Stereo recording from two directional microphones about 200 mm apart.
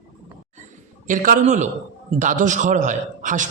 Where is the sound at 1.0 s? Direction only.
40° right (ahead or behind).